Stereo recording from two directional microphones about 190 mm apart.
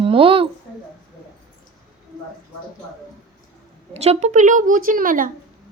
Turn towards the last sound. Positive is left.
turn(degrees=-45)  # may be behind; listen again after turning